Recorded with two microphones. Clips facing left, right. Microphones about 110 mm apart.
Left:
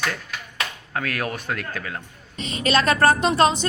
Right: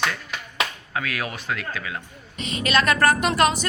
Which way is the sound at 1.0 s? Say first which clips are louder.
Left 2 dB; 45° left (ahead or behind).